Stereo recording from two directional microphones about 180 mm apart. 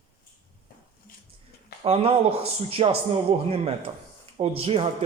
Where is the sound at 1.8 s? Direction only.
30° right (ahead or behind).